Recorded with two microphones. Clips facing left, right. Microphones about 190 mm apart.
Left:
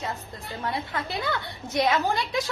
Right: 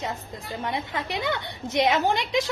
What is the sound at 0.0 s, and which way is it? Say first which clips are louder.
A woman's voice: right 1 dB; 20° right (ahead or behind).